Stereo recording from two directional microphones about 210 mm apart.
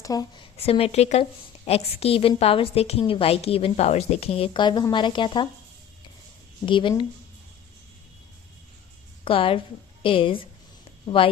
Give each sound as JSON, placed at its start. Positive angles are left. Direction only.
{"t": 0.0, "sound": "a woman's voice", "side_deg": 20}
{"t": 6.7, "sound": "a woman's voice", "side_deg": 25}
{"t": 9.2, "sound": "a woman's voice", "side_deg": 25}